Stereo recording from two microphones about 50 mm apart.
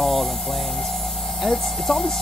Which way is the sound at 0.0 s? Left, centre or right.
Centre.